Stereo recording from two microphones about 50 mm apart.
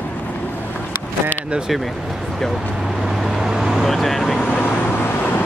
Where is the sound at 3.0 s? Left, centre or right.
Centre.